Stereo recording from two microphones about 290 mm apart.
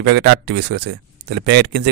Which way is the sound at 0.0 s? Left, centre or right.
Right.